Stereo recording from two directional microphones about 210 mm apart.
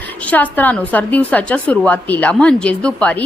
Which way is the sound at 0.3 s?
10° left (ahead or behind).